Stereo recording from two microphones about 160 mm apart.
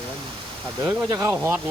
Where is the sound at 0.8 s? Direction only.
20° right (ahead or behind).